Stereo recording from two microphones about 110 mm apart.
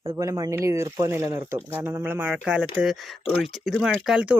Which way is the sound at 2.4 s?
10° right (ahead or behind).